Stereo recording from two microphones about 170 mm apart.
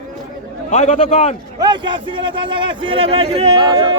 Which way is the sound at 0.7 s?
40° left (ahead or behind).